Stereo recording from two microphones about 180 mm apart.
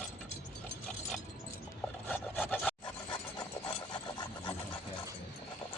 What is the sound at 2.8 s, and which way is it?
Dog, 25° left (ahead or behind).